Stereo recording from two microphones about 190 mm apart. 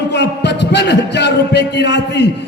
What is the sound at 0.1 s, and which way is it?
A man's voice, 65° left (ahead or behind).